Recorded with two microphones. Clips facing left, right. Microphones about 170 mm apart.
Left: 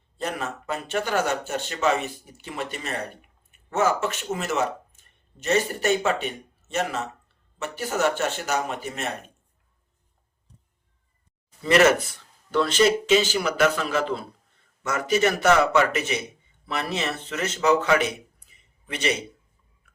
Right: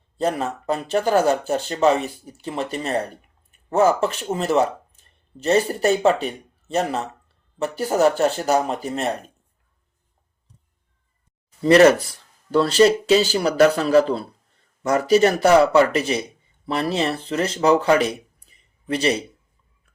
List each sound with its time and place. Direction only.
0.2 s speech: 35° right (ahead or behind)
11.6 s speech: 35° right (ahead or behind)